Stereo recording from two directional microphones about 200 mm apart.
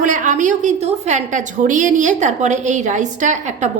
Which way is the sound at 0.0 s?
40° right (ahead or behind).